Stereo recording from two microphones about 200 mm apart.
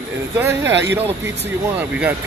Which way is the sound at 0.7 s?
60° right (ahead or behind).